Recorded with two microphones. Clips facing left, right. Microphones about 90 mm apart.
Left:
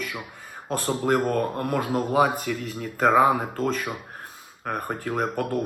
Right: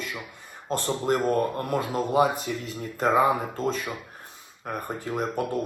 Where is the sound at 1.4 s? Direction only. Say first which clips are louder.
Left 1 dB; 40° left (ahead or behind).